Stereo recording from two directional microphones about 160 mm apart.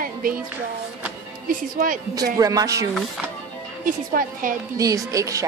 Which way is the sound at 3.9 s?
55° right (ahead or behind).